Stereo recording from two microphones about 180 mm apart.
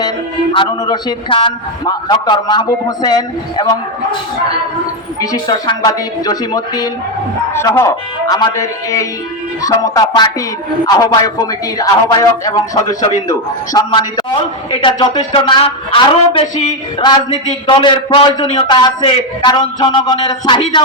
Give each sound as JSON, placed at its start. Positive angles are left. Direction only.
{"t": 0.5, "sound": "a man's voice", "side_deg": 25}
{"t": 5.2, "sound": "a man's voice", "side_deg": 20}
{"t": 12.5, "sound": "a man's voice", "side_deg": 20}